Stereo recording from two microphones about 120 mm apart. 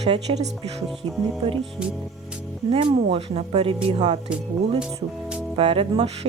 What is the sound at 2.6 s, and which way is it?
Speech, 60° right (ahead or behind).